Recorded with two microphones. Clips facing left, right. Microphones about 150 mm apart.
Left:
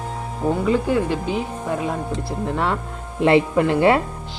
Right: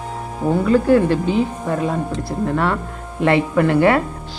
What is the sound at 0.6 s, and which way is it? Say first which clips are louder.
Speech: right 7 dB; 15° left (ahead or behind).